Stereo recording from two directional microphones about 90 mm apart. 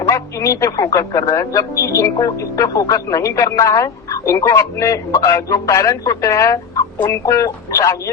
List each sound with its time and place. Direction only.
0.1 s speech: 35° left (ahead or behind)